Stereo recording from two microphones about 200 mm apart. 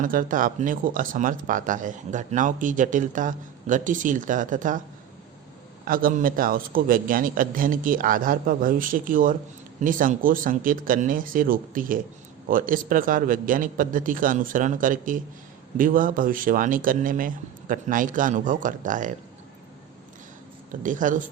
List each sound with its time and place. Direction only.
0.0 s speech: 45° right (ahead or behind)
5.8 s a man's voice: 45° right (ahead or behind)
20.8 s speech: 40° right (ahead or behind)